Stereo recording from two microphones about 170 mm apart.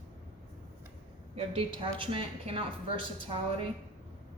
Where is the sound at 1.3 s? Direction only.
35° right (ahead or behind).